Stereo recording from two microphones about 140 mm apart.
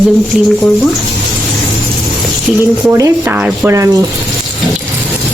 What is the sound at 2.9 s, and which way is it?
Speech, 25° right (ahead or behind).